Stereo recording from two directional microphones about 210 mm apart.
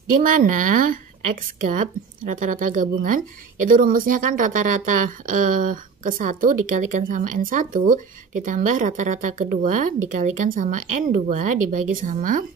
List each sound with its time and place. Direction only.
0.2 s speech: 40° right (ahead or behind)